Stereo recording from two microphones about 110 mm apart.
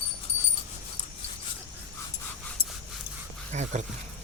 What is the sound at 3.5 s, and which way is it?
Speech, 90° right.